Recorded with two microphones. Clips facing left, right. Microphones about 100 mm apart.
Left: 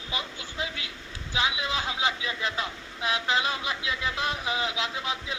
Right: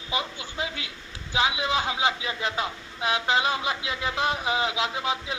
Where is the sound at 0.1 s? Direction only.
20° right (ahead or behind).